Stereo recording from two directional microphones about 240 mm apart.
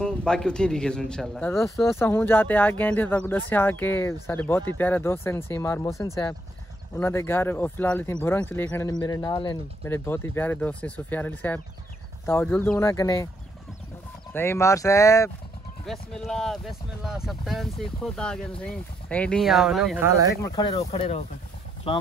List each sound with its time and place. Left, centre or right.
0.0 s speech: centre
14.3 s speech: centre
15.8 s speech: centre
20.4 s speech: centre
20.7 s speech: left